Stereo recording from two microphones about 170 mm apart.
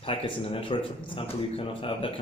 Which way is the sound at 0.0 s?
30° left (ahead or behind).